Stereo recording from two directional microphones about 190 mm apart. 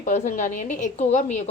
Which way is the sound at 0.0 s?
40° left (ahead or behind).